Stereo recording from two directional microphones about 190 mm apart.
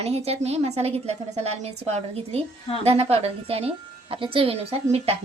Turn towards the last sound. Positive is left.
turn(degrees=-30)  # may be behind; listen again after turning